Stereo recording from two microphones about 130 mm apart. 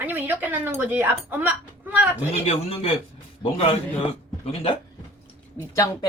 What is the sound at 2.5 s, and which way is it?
Speech, 50° left (ahead or behind).